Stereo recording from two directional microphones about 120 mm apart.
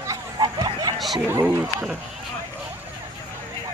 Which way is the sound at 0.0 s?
30° right (ahead or behind).